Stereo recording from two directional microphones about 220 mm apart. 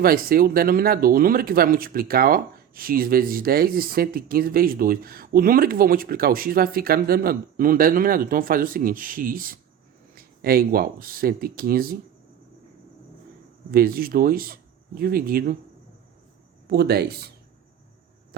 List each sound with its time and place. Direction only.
0.0 s speech: 40° right (ahead or behind)
13.7 s speech: 40° right (ahead or behind)
16.6 s speech: 45° right (ahead or behind)